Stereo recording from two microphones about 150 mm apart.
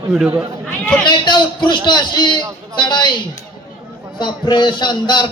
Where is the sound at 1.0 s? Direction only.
30° left (ahead or behind).